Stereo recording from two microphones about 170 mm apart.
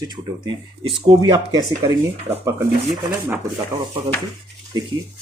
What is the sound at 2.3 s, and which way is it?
Speech, 15° right (ahead or behind).